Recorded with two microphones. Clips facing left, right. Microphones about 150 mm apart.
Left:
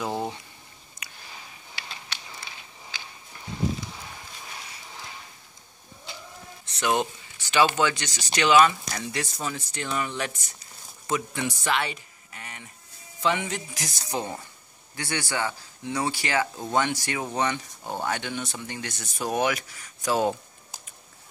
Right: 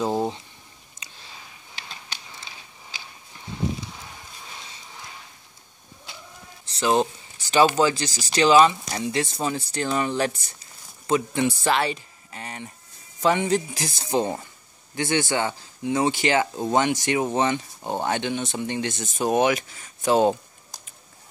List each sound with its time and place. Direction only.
0.0 s boiling: 25° right (ahead or behind)
6.6 s a sound: 30° right (ahead or behind)
7.5 s speech: 35° right (ahead or behind)